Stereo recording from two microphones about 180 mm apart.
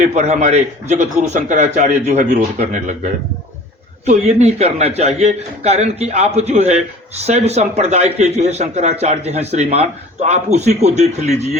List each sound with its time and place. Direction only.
0.0 s a man's voice: 40° right (ahead or behind)